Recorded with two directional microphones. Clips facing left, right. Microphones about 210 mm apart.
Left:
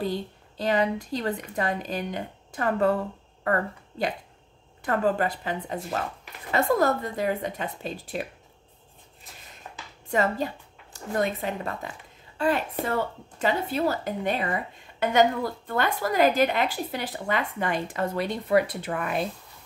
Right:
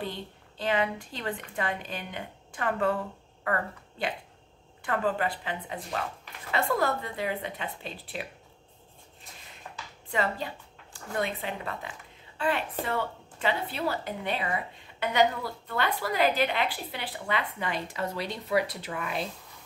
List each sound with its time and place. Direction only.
0.0 s a woman's voice: 40° left (ahead or behind)
10.0 s a woman's voice: 45° left (ahead or behind)